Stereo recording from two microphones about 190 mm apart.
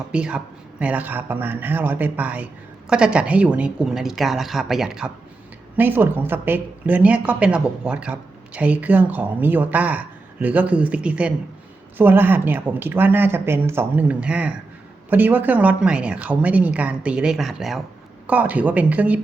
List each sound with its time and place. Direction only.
0.1 s a woman's voice: 5° right (ahead or behind)